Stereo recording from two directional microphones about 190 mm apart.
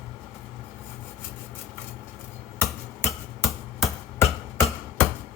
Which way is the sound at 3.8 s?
15° left (ahead or behind).